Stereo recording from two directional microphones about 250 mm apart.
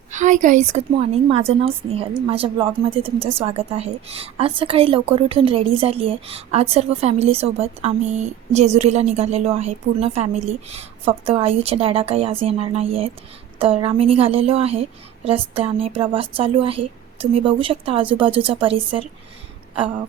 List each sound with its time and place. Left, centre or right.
0.1 s a woman's voice: right